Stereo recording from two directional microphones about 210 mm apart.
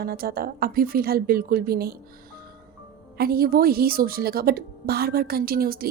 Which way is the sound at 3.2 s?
45° right (ahead or behind).